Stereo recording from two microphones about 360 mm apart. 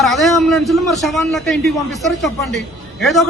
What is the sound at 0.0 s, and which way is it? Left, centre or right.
A man's voice, centre.